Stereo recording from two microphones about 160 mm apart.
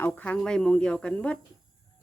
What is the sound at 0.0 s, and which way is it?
Speech, 10° left (ahead or behind).